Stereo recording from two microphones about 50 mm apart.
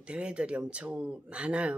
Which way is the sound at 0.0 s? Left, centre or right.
Right.